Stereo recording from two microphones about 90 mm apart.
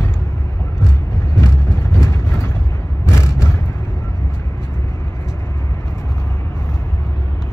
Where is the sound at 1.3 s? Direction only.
30° left (ahead or behind).